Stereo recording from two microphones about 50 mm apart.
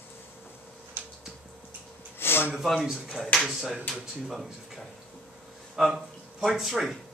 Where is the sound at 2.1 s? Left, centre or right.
Left.